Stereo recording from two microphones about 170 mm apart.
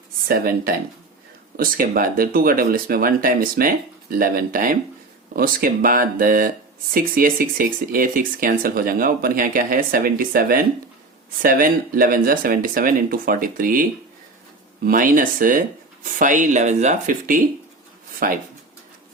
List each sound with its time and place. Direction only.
0.3 s speech: 60° right (ahead or behind)
14.8 s speech: 55° right (ahead or behind)